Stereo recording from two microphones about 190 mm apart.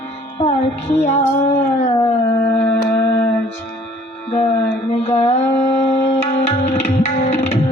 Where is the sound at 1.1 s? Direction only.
35° left (ahead or behind).